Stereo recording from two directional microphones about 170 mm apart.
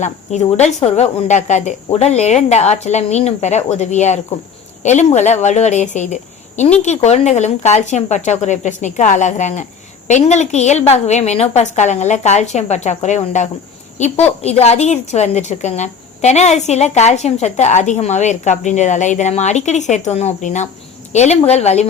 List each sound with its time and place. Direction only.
0.0 s a woman's voice: 40° left (ahead or behind)